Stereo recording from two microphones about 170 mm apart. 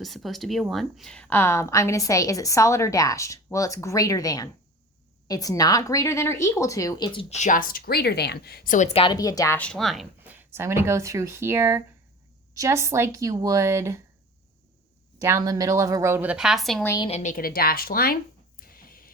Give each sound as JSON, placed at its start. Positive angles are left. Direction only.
{"t": 0.0, "sound": "a woman's voice", "side_deg": 0}
{"t": 8.9, "sound": "a woman's voice", "side_deg": 35}
{"t": 9.1, "sound": "a woman's voice", "side_deg": 20}
{"t": 9.6, "sound": "speech", "side_deg": 5}
{"t": 15.2, "sound": "speech", "side_deg": -20}
{"t": 16.8, "sound": "a woman's voice", "side_deg": 20}
{"t": 17.1, "sound": "a woman's voice", "side_deg": 40}
{"t": 17.3, "sound": "a sound", "side_deg": 60}